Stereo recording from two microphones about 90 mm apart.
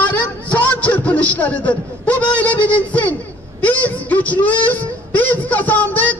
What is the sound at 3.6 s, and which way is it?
Speech, 15° left (ahead or behind).